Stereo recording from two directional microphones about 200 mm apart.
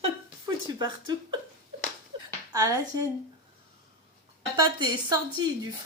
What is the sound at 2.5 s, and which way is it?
Speech, 15° right (ahead or behind).